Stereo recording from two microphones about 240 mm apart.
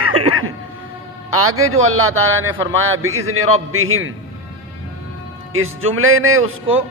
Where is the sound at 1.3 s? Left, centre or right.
Right.